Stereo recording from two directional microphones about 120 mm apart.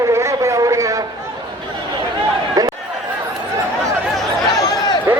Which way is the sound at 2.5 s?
30° right (ahead or behind).